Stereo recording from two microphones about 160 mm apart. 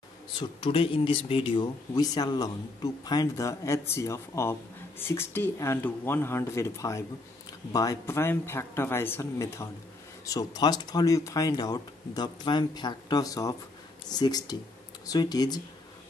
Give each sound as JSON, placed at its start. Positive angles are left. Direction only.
{"t": 0.4, "sound": "speech", "side_deg": 35}